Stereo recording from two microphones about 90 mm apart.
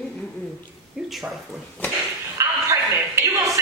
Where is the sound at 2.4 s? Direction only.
35° right (ahead or behind).